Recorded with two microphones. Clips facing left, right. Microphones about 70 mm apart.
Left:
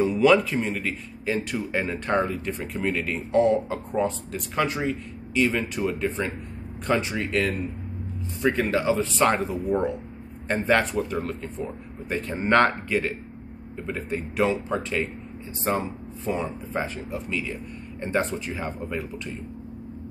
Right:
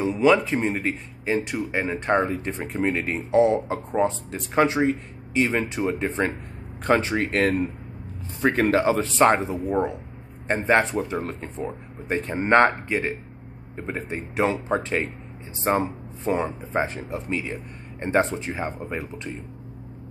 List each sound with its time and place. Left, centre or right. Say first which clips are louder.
0.0 s speech: even; centre
0.6 s speech: right 2 dB; right
1.2 s speech: right 2 dB; centre
3.6 s speech: right 2 dB; right
9.3 s speech: right 2 dB; right
18.4 s speech: right 2 dB; right